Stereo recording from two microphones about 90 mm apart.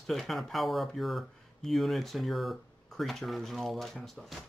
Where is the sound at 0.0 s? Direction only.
Centre (ahead or behind).